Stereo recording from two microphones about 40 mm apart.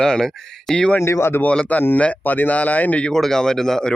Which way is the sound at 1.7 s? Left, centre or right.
Left.